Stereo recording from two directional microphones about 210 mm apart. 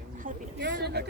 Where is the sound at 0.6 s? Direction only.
60° right (ahead or behind).